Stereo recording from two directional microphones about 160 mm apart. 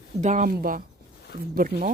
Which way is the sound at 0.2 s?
50° right (ahead or behind).